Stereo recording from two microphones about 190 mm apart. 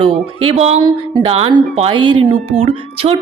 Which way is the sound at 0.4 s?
35° right (ahead or behind).